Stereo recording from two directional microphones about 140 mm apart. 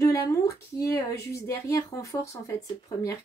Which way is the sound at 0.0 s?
20° left (ahead or behind).